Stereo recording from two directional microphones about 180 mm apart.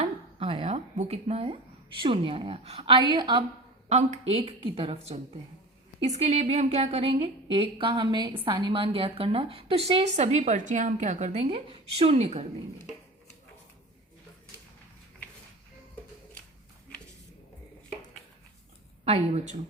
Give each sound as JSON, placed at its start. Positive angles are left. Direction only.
{"t": 0.0, "sound": "a sound", "side_deg": -30}
{"t": 2.0, "sound": "a woman's voice", "side_deg": -30}
{"t": 3.8, "sound": "a woman's voice", "side_deg": -40}
{"t": 19.0, "sound": "a woman's voice", "side_deg": -40}